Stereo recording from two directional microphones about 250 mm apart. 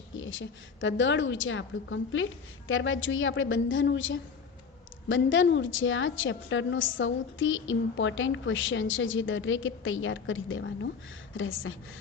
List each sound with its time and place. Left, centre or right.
0.2 s a woman's voice: left